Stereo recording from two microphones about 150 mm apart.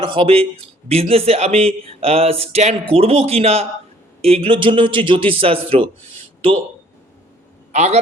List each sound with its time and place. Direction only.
0.0 s a man's voice: 35° right (ahead or behind)
7.7 s a man's voice: 50° right (ahead or behind)